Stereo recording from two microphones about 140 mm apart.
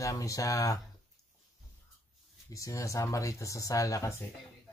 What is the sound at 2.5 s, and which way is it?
Speech, 20° left (ahead or behind).